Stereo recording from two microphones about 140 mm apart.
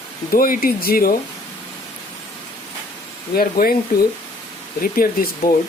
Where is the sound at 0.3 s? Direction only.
85° left.